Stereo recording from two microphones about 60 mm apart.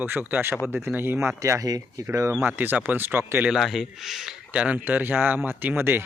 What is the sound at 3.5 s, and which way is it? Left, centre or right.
Speech, centre.